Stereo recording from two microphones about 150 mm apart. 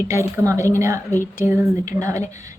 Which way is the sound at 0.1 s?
20° right (ahead or behind).